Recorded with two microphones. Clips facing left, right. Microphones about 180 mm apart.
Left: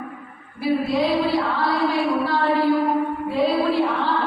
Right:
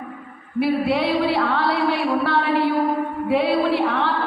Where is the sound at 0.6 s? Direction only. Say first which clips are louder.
Right 1 dB; 65° right (ahead or behind).